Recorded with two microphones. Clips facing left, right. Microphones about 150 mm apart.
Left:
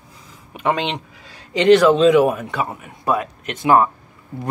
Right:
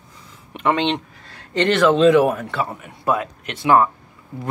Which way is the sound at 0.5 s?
5° left (ahead or behind).